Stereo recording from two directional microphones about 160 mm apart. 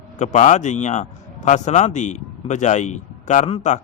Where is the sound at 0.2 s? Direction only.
50° left (ahead or behind).